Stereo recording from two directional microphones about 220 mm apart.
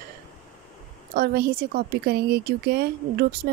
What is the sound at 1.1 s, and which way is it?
Speech, 45° right (ahead or behind).